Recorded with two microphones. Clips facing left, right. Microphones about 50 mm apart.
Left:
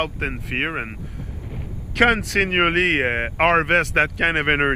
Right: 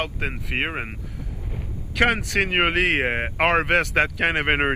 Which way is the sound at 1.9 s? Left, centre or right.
Left.